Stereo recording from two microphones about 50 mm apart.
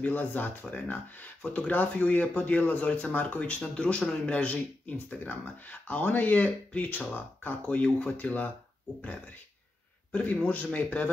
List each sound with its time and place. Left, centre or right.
0.0 s speech: left
10.3 s speech: left